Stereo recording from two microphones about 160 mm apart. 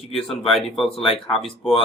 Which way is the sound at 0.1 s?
Centre (ahead or behind).